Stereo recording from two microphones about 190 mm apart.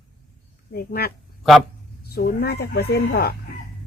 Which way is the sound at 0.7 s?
55° left (ahead or behind).